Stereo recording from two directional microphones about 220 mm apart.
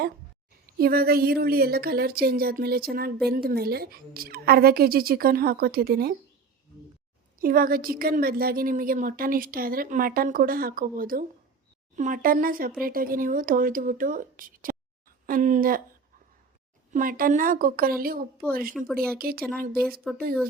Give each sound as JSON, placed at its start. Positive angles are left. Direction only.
{"t": 0.8, "sound": "a woman's voice", "side_deg": -45}
{"t": 7.3, "sound": "a woman's voice", "side_deg": -40}
{"t": 16.9, "sound": "a woman's voice", "side_deg": -40}
{"t": 18.8, "sound": "speech", "side_deg": 0}
{"t": 19.2, "sound": "a woman's voice", "side_deg": -45}
{"t": 19.7, "sound": "speech", "side_deg": 0}